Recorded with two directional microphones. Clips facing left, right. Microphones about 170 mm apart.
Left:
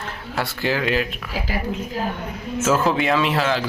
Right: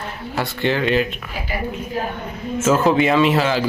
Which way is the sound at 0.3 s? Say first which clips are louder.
Right 2 dB; centre (ahead or behind).